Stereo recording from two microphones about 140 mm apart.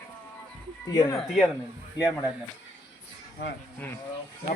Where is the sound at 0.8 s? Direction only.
30° left (ahead or behind).